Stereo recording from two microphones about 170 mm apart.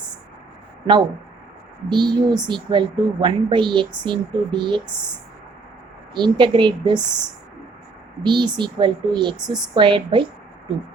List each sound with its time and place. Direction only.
1.9 s a woman's voice: 25° right (ahead or behind)
6.1 s a woman's voice: 25° right (ahead or behind)
7.0 s speech: 5° right (ahead or behind)
8.2 s a woman's voice: 25° right (ahead or behind)